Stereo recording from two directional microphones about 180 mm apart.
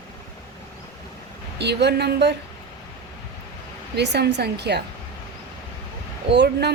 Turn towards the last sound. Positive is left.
turn(degrees=-65)  # may be behind; listen again after turning